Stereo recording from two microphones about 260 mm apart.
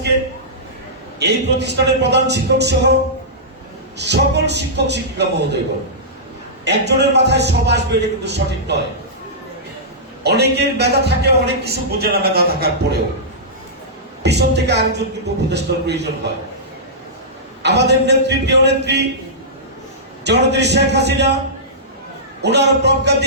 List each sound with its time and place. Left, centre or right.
1.2 s a man's voice: right
6.7 s a man's voice: right
10.2 s a man's voice: right
14.2 s a sound: right
15.5 s a man's voice: right
17.6 s a man's voice: right
20.2 s a man's voice: right
22.4 s a man's voice: right